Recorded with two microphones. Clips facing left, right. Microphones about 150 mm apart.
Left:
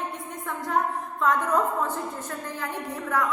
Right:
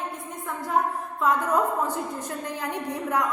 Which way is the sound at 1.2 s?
10° right (ahead or behind).